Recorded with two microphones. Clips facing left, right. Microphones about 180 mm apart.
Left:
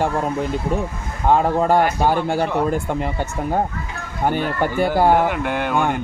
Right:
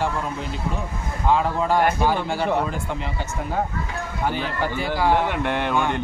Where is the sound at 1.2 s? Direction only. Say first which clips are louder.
Left 4 dB; 50° left (ahead or behind).